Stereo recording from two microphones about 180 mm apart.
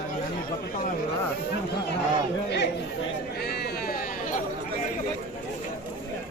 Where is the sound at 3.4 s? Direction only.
60° left (ahead or behind).